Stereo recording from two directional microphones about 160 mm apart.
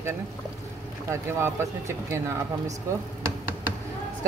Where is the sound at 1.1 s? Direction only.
15° right (ahead or behind).